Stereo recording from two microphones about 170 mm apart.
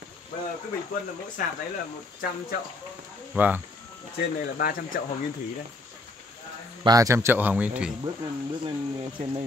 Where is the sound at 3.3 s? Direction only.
10° right (ahead or behind).